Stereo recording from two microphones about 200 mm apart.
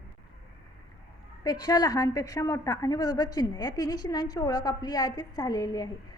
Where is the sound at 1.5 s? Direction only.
20° left (ahead or behind).